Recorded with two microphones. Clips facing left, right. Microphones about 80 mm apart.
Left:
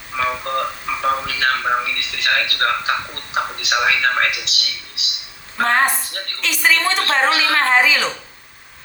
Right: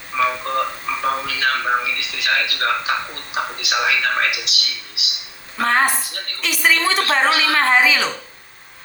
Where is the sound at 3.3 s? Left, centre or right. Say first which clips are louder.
Left 2 dB; left.